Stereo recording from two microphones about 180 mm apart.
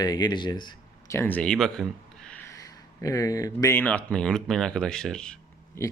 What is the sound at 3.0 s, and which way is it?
Speech, 20° left (ahead or behind).